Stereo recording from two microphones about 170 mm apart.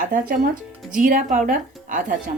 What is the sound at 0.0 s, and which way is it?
A woman's voice, 55° right (ahead or behind).